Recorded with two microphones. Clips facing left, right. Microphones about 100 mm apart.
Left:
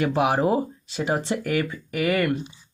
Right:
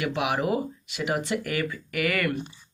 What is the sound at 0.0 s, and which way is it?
Speech, 35° left (ahead or behind).